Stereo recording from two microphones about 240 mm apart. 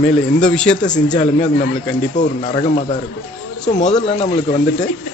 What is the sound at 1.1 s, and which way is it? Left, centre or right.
Speech, left.